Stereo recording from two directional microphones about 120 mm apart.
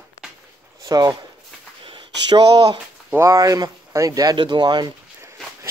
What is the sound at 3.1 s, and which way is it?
Speech, 25° right (ahead or behind).